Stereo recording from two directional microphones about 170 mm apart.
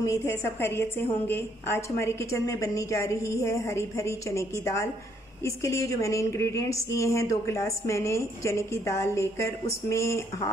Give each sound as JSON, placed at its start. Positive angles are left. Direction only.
{"t": 0.0, "sound": "a woman's voice", "side_deg": 15}